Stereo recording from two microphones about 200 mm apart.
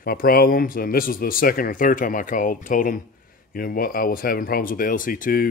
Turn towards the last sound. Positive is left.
turn(degrees=45)  # may be behind; listen again after turning